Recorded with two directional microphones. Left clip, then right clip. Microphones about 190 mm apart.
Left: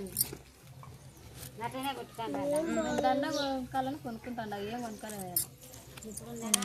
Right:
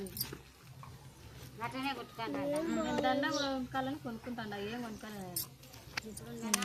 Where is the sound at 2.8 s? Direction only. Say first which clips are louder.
Left 1 dB; 25° left (ahead or behind).